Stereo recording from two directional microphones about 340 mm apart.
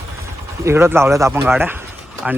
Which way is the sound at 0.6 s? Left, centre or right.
Centre.